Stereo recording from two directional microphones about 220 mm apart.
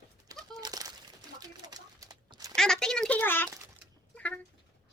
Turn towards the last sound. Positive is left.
turn(degrees=5)  # may be behind; listen again after turning